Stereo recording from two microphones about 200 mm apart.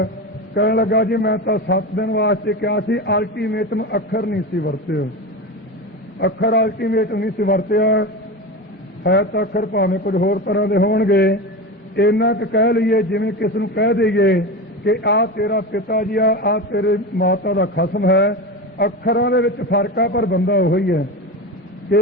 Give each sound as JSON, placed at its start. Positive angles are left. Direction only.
{"t": 0.5, "sound": "a man's voice", "side_deg": 55}
{"t": 6.1, "sound": "a man's voice", "side_deg": 55}